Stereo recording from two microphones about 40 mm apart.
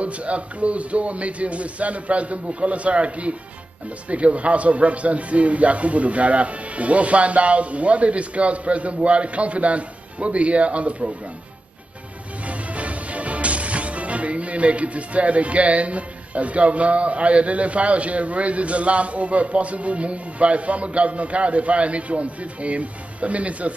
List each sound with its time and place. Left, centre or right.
0.0 s music: right
12.4 s music: right